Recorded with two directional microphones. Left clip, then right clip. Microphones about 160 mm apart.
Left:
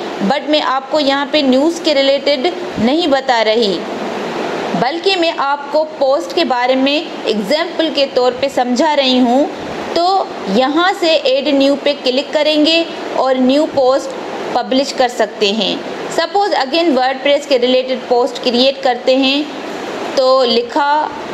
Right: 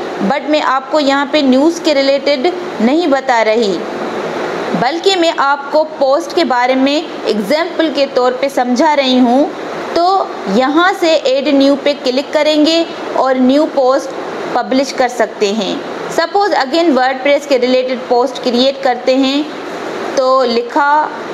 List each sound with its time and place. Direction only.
0.3 s a woman's voice: centre (ahead or behind)
4.8 s a woman's voice: 5° right (ahead or behind)